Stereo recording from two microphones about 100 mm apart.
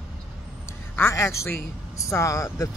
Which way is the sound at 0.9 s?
25° left (ahead or behind).